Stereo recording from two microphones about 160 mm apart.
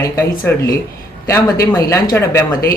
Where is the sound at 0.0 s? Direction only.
20° left (ahead or behind).